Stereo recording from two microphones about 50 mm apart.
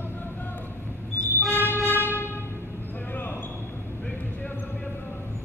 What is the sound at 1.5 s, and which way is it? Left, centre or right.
Music, left.